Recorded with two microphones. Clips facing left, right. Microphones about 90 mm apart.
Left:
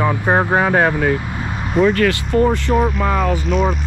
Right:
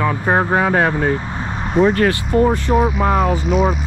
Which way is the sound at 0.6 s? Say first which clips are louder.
Left 1 dB; 45° left (ahead or behind).